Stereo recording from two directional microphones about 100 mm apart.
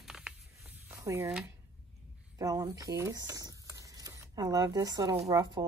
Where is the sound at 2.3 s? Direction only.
35° right (ahead or behind).